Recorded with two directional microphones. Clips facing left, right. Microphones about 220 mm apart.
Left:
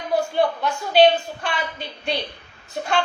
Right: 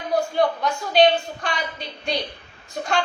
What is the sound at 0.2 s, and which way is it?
A woman's voice, 5° left (ahead or behind).